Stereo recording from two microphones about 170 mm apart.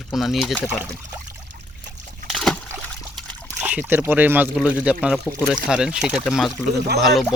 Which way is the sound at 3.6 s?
10° right (ahead or behind).